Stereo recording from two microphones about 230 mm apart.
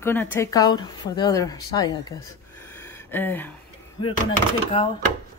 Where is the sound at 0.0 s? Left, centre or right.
Centre.